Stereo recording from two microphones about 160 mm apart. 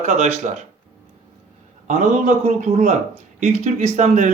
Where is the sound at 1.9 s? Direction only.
45° right (ahead or behind).